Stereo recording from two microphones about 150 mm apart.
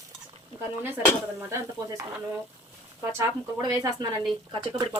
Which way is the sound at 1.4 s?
20° right (ahead or behind).